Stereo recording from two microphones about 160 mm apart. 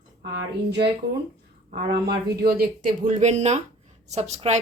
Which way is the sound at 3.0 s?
45° right (ahead or behind).